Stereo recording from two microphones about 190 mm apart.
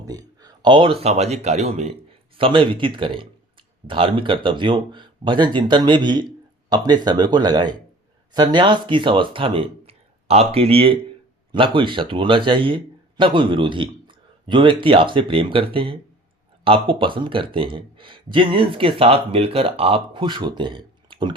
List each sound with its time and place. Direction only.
0.0 s speech: 20° right (ahead or behind)